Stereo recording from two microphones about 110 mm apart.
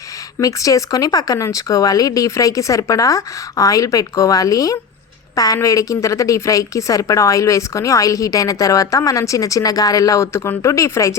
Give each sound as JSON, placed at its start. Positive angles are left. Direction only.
{"t": 0.4, "sound": "a woman's voice", "side_deg": 30}